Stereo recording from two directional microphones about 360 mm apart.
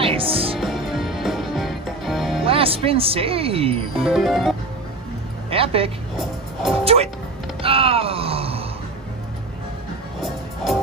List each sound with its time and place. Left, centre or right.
0.0 s music: centre
0.6 s music: centre
2.4 s speech: centre
4.0 s music: centre
5.5 s vehicle: centre
6.8 s speech: centre
7.6 s groan: centre